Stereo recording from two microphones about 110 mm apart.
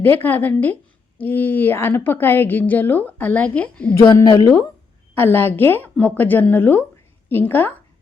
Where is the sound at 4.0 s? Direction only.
25° left (ahead or behind).